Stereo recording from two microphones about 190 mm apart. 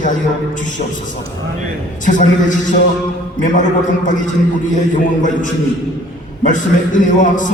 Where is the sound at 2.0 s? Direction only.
45° left (ahead or behind).